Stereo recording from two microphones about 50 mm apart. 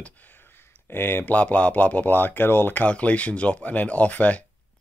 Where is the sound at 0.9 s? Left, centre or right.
Left.